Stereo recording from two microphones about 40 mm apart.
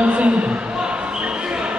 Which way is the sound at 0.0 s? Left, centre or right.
Right.